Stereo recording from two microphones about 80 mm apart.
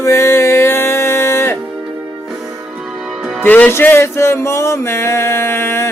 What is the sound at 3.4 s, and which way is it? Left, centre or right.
Music, left.